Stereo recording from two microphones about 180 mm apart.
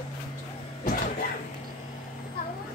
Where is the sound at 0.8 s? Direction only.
55° left (ahead or behind).